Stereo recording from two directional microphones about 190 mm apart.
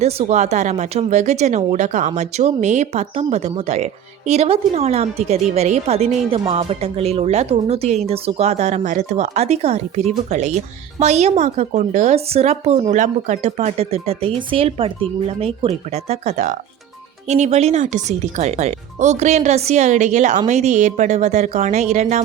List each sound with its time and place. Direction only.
0.0 s speech: 35° right (ahead or behind)